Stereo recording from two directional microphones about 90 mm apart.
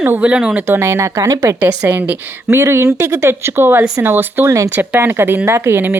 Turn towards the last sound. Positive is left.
turn(degrees=-25)  # may be behind; listen again after turning